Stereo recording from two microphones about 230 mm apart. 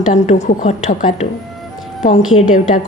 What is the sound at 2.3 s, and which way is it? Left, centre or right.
Speech, left.